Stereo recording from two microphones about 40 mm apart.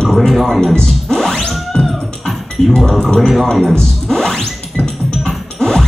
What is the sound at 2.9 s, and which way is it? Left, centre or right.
Speech, centre.